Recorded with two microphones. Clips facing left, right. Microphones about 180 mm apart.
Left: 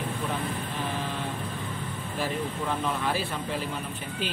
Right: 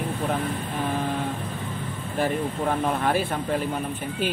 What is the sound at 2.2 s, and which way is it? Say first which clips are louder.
Speech: right 6 dB; 55° right (ahead or behind).